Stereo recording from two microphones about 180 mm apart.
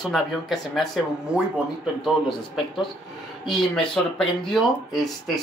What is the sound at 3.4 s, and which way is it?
Speech, 5° left (ahead or behind).